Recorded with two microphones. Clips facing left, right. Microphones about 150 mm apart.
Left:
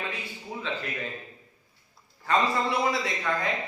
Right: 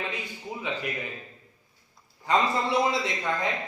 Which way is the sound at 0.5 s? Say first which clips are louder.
Left 1 dB; 10° right (ahead or behind).